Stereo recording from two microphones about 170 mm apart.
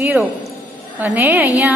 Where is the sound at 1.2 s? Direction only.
15° right (ahead or behind).